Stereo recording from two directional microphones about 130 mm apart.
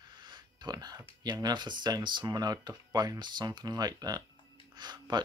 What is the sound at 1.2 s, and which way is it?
Speech, 30° right (ahead or behind).